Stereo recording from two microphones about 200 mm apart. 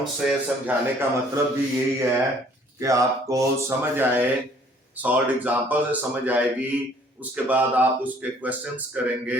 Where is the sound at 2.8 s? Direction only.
15° right (ahead or behind).